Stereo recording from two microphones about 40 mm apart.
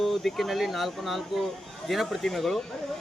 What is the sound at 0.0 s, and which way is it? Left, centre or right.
Speech, centre.